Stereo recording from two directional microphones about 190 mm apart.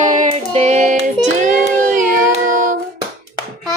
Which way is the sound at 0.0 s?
40° right (ahead or behind).